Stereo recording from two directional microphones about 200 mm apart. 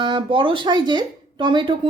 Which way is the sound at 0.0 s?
25° right (ahead or behind).